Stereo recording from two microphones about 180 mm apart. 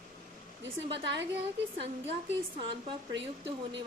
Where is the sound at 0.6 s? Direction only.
75° right (ahead or behind).